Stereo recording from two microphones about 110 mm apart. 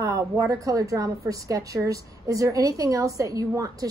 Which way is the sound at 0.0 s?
30° right (ahead or behind).